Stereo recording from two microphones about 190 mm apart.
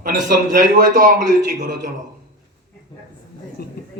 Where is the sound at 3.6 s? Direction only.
55° left (ahead or behind).